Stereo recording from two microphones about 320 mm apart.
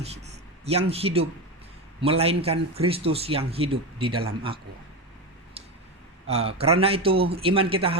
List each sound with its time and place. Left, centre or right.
0.0 s a man's voice: centre
6.2 s a man's voice: centre